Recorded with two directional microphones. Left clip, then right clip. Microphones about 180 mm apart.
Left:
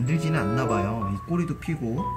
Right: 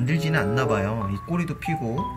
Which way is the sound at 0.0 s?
10° right (ahead or behind).